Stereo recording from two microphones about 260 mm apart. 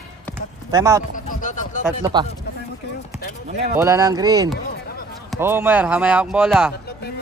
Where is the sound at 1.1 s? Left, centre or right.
Left.